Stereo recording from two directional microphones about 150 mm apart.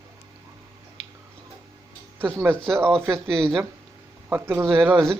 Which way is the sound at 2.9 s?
5° left (ahead or behind).